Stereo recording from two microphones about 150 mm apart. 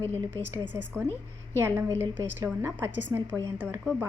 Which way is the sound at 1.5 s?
15° right (ahead or behind).